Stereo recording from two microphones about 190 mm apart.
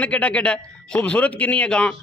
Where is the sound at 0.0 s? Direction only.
5° left (ahead or behind).